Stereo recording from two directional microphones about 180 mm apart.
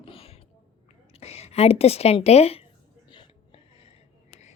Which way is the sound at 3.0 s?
30° left (ahead or behind).